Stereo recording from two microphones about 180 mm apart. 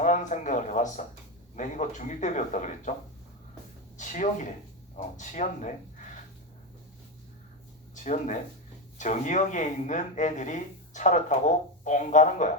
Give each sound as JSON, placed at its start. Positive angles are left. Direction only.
{"t": 0.0, "sound": "speech", "side_deg": 45}
{"t": 3.9, "sound": "speech", "side_deg": 45}
{"t": 7.9, "sound": "speech", "side_deg": 40}